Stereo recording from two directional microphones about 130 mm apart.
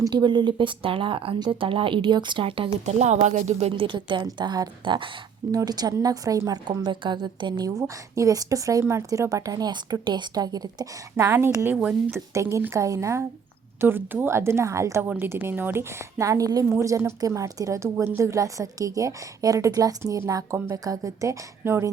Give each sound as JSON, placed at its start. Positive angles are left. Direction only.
{"t": 0.0, "sound": "speech", "side_deg": -35}
{"t": 3.0, "sound": "speech", "side_deg": -65}
{"t": 3.8, "sound": "a woman's voice", "side_deg": -40}